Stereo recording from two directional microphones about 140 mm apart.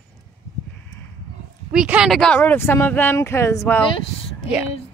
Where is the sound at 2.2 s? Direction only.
10° left (ahead or behind).